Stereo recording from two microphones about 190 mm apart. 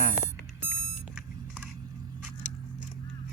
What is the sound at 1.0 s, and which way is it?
Vehicle, 5° right (ahead or behind).